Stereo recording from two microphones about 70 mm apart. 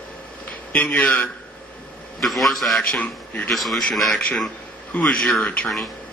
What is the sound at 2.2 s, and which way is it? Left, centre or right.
Speech, centre.